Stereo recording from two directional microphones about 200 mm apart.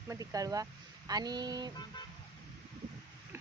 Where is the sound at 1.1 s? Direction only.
20° right (ahead or behind).